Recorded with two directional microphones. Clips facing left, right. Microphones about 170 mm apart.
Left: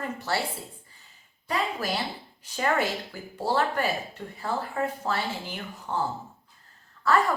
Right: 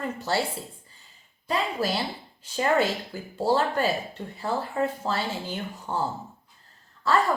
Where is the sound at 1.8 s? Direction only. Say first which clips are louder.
Right 3 dB; 30° right (ahead or behind).